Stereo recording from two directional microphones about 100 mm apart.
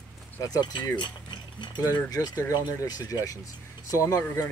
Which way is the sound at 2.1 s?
40° left (ahead or behind).